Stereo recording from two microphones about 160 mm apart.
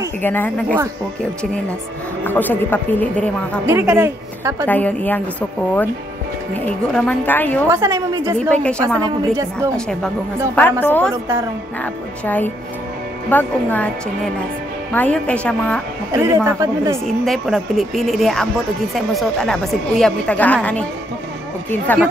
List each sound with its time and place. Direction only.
0.2 s speech: 10° left (ahead or behind)
2.2 s speech: 10° left (ahead or behind)
3.6 s a woman's voice: 15° right (ahead or behind)
4.6 s speech: 10° left (ahead or behind)
6.9 s speech: 10° left (ahead or behind)
7.7 s a woman's voice: 20° right (ahead or behind)
8.4 s speech: 5° left (ahead or behind)
9.0 s a woman's voice: 20° right (ahead or behind)
10.5 s speech: 10° left (ahead or behind)
16.1 s a woman's voice: 15° right (ahead or behind)
17.0 s a woman's voice: centre (ahead or behind)